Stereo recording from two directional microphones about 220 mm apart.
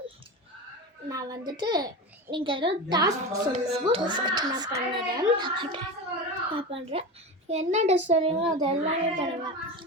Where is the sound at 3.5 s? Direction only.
30° right (ahead or behind).